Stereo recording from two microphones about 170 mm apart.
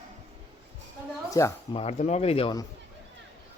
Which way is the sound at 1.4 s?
20° left (ahead or behind).